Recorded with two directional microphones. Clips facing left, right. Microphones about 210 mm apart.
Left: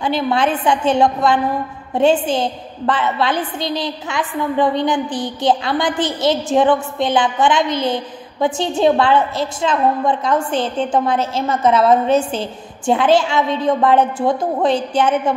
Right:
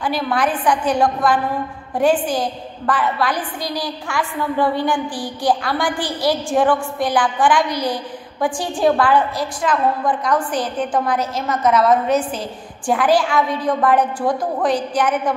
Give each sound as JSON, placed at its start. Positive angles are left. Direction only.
{"t": 0.0, "sound": "a woman's voice", "side_deg": 25}